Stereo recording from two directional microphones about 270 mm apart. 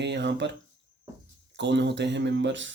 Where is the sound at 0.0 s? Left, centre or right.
Right.